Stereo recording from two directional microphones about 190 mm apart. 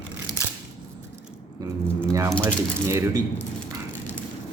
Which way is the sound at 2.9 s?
15° right (ahead or behind).